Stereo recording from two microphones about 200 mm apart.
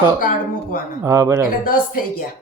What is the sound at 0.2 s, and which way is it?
Speech, 45° left (ahead or behind).